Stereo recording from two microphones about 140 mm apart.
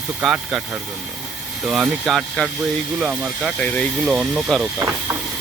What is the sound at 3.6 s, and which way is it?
Speech, 10° left (ahead or behind).